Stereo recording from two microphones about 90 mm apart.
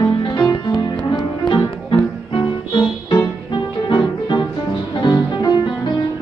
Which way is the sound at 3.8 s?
60° left (ahead or behind).